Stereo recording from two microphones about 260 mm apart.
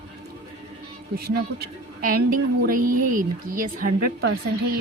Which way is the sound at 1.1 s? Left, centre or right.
Right.